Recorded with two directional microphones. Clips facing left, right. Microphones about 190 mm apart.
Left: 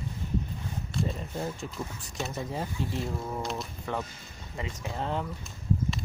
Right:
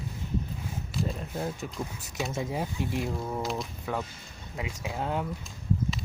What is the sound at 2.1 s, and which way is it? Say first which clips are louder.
Speech: right 2 dB; 5° right (ahead or behind).